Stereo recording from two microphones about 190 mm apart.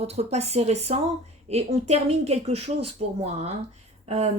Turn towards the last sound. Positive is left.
turn(degrees=-35)  # may be behind; listen again after turning